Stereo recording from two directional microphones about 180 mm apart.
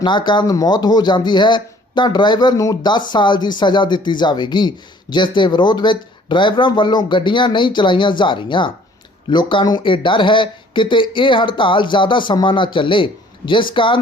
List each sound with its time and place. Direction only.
0.0 s speech: 25° left (ahead or behind)